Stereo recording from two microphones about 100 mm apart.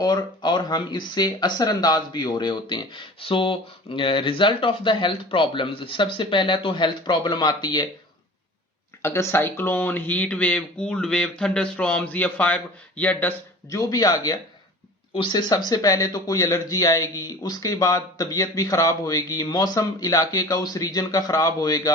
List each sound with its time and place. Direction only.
0.0 s speech: 45° left (ahead or behind)
9.0 s speech: 25° left (ahead or behind)
13.7 s speech: 35° left (ahead or behind)